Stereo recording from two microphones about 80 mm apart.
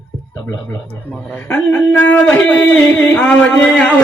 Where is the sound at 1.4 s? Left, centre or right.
Left.